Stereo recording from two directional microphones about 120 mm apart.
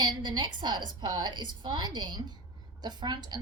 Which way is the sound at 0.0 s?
40° right (ahead or behind).